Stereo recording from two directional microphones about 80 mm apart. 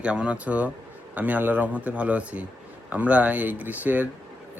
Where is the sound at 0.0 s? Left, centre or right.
Centre.